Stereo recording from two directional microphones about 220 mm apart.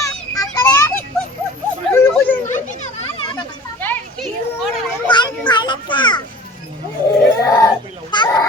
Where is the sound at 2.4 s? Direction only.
35° left (ahead or behind).